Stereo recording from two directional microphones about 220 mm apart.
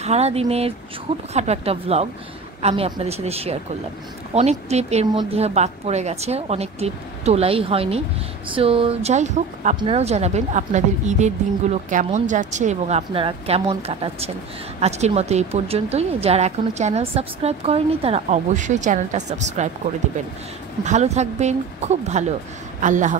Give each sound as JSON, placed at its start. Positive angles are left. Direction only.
{"t": 0.0, "sound": "a woman's voice", "side_deg": -30}
{"t": 20.8, "sound": "a woman's voice", "side_deg": -30}